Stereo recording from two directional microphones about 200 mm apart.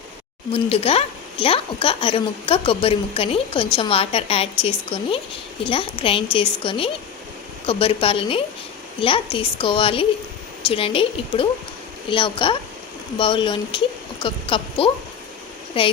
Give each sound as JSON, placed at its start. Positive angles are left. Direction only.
{"t": 0.5, "sound": "a woman's voice", "side_deg": 30}